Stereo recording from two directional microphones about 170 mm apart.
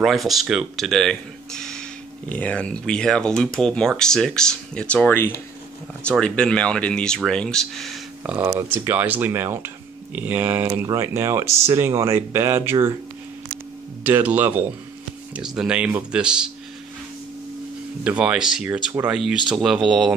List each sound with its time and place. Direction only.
0.0 s speech: centre (ahead or behind)
8.2 s speech: 10° right (ahead or behind)
14.0 s speech: 10° right (ahead or behind)
18.0 s speech: 5° right (ahead or behind)